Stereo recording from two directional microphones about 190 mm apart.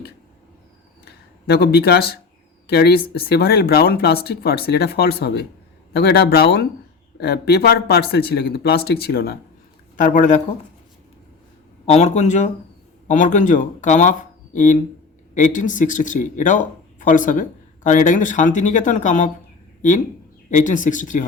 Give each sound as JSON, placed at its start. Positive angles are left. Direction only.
{"t": 1.0, "sound": "a sound", "side_deg": 60}
{"t": 2.6, "sound": "speech", "side_deg": 60}
{"t": 10.0, "sound": "speech", "side_deg": 45}
{"t": 11.9, "sound": "speech", "side_deg": 35}
{"t": 20.5, "sound": "speech", "side_deg": 40}